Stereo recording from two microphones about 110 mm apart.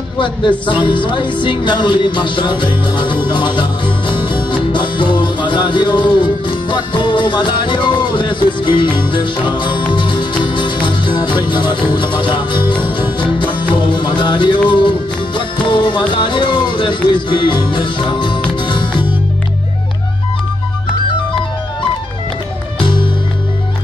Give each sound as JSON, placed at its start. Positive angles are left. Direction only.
{"t": 0.2, "sound": "music", "side_deg": 50}
{"t": 22.8, "sound": "music", "side_deg": 50}